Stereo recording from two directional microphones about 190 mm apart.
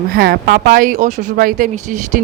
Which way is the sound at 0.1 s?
50° right (ahead or behind).